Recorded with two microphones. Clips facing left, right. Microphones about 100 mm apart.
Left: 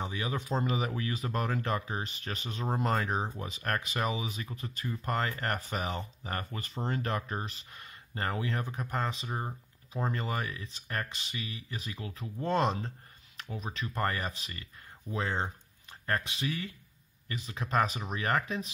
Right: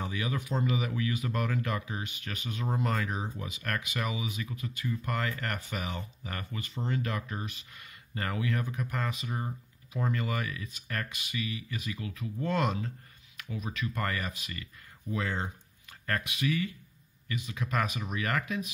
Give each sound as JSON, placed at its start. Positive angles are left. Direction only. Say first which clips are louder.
{"t": 0.0, "sound": "speech", "louder": "right 1 dB", "side_deg": 25}